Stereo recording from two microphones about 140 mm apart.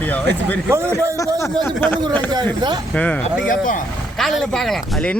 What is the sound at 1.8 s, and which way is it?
Speech, 15° left (ahead or behind).